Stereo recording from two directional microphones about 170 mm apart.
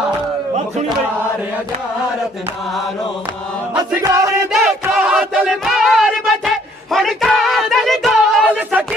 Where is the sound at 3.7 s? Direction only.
20° right (ahead or behind).